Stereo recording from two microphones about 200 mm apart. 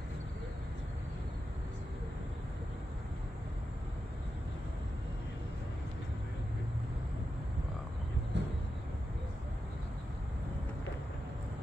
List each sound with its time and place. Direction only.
8.3 s vehicle: 60° right (ahead or behind)